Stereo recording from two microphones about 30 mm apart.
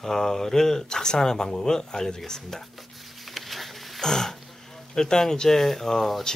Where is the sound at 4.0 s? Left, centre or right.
Centre.